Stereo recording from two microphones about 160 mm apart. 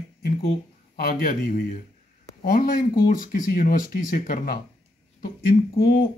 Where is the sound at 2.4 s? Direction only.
65° left (ahead or behind).